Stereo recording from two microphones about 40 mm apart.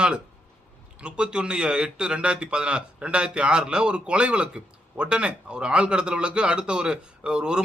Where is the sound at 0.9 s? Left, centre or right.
Right.